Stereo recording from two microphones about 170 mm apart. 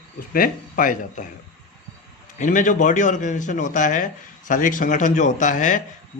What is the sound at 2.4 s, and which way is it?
A man's voice, 50° left (ahead or behind).